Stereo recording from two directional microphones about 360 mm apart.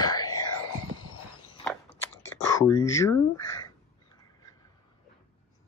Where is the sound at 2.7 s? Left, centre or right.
Centre.